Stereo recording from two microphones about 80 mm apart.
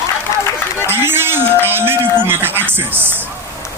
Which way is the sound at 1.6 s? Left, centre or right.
Right.